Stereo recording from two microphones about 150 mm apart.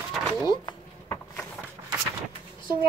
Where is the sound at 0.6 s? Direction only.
20° left (ahead or behind).